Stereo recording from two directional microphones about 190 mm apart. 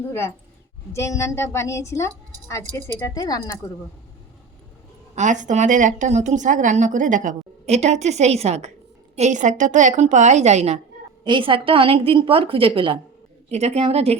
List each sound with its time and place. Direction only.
0.1 s a woman's voice: 15° left (ahead or behind)
5.1 s a woman's voice: 40° right (ahead or behind)
11.2 s a woman's voice: 25° right (ahead or behind)